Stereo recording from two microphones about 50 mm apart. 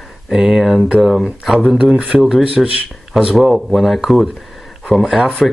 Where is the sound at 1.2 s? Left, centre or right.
Centre.